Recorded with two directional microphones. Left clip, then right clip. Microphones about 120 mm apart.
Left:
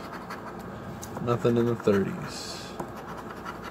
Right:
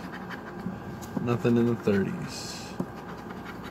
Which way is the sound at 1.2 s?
5° left (ahead or behind).